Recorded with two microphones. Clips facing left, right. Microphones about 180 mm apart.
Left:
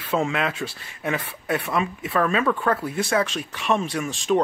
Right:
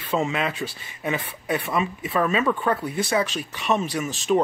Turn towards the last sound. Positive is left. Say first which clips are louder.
# even
turn(degrees=0)  # may be behind; listen again after turning